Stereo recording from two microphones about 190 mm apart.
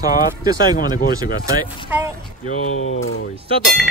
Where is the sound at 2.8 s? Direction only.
90° left.